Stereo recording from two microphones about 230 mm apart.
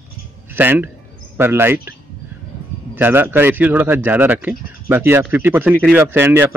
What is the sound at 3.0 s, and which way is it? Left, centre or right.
Speech, centre.